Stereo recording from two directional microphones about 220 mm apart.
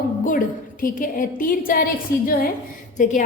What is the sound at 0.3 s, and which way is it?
A woman's voice, 40° left (ahead or behind).